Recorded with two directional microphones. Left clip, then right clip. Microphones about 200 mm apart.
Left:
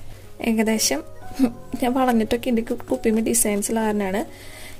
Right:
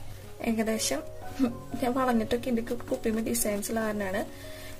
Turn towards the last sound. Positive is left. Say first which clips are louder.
# left 6 dB
turn(degrees=45)  # may be behind; listen again after turning